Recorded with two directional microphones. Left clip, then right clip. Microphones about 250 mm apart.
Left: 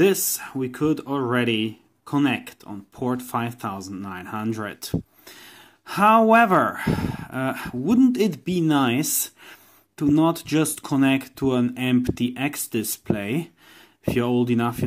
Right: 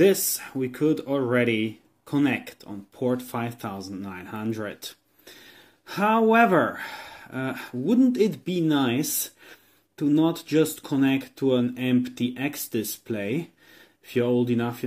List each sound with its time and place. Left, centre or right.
0.5 s speech: centre